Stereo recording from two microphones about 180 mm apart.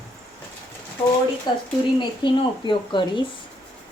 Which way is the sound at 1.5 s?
25° left (ahead or behind).